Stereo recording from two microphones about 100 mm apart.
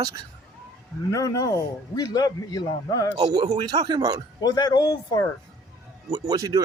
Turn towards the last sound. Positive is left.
turn(degrees=-35)  # may be behind; listen again after turning